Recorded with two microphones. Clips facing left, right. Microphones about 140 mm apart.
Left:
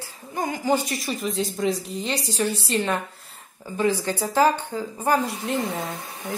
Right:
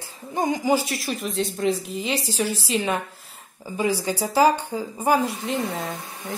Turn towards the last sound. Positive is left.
turn(degrees=0)  # may be behind; listen again after turning